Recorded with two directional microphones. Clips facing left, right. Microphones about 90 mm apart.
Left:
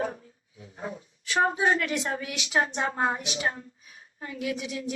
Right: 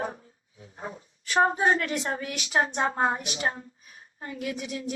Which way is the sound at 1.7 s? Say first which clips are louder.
Even; 35° right (ahead or behind).